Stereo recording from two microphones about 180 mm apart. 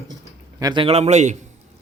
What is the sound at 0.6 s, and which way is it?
Speech, 20° right (ahead or behind).